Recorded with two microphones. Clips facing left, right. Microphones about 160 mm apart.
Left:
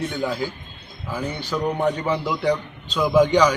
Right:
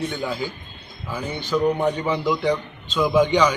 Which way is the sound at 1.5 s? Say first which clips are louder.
Right 2 dB; 5° right (ahead or behind).